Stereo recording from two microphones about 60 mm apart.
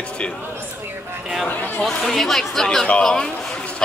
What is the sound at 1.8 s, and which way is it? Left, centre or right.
Speech, centre.